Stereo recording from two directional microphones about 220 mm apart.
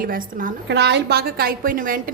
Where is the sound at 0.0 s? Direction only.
40° right (ahead or behind).